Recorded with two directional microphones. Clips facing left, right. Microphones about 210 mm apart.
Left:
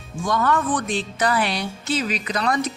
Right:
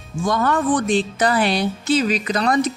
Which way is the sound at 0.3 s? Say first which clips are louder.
Right 3 dB; 30° right (ahead or behind).